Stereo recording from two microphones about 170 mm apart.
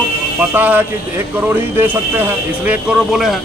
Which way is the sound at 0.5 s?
10° right (ahead or behind).